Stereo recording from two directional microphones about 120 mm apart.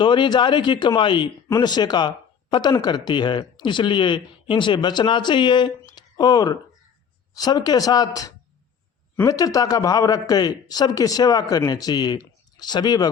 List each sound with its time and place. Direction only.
0.0 s speech: 40° left (ahead or behind)